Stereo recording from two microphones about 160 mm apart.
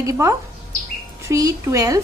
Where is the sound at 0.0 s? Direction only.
20° right (ahead or behind).